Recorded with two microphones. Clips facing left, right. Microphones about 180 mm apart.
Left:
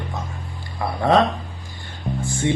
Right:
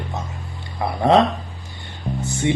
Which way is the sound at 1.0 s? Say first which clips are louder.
Right 2 dB; 20° right (ahead or behind).